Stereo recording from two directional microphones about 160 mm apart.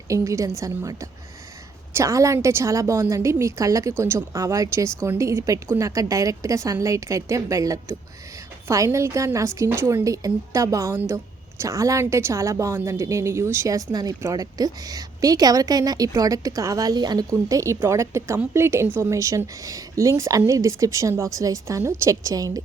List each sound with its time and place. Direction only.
0.1 s a woman's voice: 20° right (ahead or behind)